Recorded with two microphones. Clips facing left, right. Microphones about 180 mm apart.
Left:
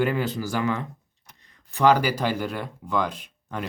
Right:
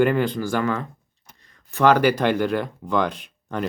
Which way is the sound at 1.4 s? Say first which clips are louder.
Right 4 dB; 20° left (ahead or behind).